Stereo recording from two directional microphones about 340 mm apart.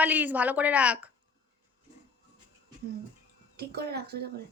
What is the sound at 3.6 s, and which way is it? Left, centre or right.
Speech, right.